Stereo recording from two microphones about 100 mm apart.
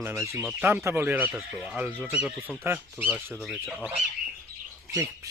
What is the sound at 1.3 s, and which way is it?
Speech, 5° right (ahead or behind).